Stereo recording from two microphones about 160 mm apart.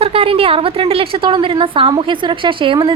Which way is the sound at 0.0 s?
35° right (ahead or behind).